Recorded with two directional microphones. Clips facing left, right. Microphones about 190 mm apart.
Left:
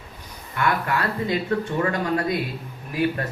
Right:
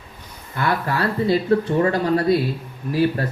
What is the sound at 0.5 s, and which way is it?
Speech, 35° right (ahead or behind).